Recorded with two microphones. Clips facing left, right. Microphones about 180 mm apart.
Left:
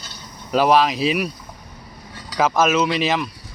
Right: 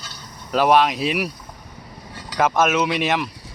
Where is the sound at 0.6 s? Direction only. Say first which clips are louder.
Even; centre (ahead or behind).